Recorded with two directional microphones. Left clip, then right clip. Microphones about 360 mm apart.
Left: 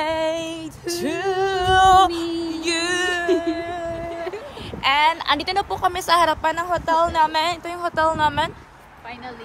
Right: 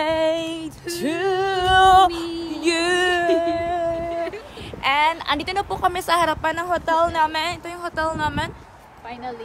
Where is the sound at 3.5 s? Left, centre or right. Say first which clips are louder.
Right 4 dB; right.